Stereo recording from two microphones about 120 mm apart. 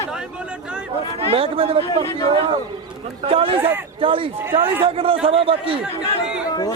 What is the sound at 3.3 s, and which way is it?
A man's voice, 50° right (ahead or behind).